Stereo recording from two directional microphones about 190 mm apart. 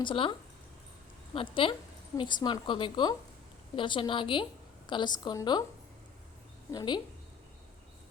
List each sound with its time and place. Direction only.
0.0 s a woman's voice: 25° left (ahead or behind)
6.7 s a woman's voice: 20° left (ahead or behind)